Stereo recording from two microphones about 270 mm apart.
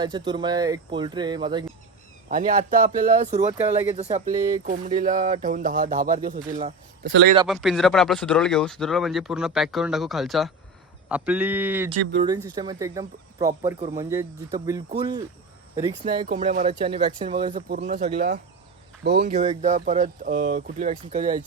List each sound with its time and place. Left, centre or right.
0.0 s speech: centre
2.3 s speech: right
5.0 s a sound: right
6.5 s speech: right
7.0 s a sound: right
7.4 s speech: centre
11.9 s speech: centre
16.2 s speech: right
17.7 s speech: right
19.0 s a sound: right
19.3 s speech: right